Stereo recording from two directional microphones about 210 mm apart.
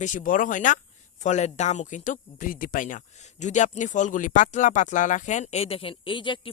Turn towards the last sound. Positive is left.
turn(degrees=25)  # may be behind; listen again after turning